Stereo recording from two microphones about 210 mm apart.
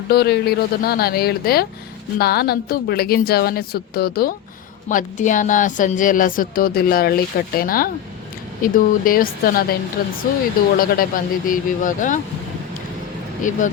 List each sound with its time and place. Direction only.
0.1 s speech: 50° left (ahead or behind)
13.5 s speech: 40° left (ahead or behind)